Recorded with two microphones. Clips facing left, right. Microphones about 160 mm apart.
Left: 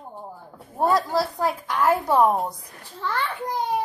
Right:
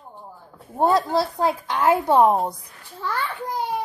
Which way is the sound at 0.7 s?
25° right (ahead or behind).